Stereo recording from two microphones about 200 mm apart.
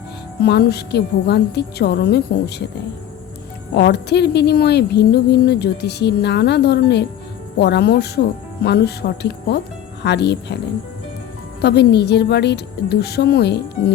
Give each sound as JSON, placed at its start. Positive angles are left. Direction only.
{"t": 0.4, "sound": "speech", "side_deg": 55}
{"t": 3.8, "sound": "speech", "side_deg": 55}
{"t": 11.6, "sound": "speech", "side_deg": 55}